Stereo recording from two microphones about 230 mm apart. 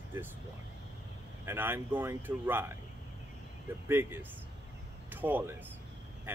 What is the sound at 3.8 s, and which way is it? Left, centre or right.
Speech, centre.